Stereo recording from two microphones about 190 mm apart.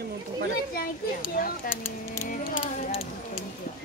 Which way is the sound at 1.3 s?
50° left (ahead or behind).